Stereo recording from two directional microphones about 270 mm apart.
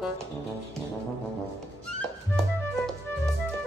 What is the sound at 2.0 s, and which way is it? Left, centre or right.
Music, centre.